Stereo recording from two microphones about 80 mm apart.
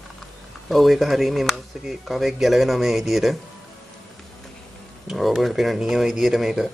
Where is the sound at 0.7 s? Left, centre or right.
Centre.